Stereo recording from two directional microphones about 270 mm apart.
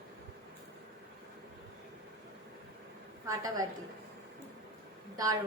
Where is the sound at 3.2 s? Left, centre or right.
Centre.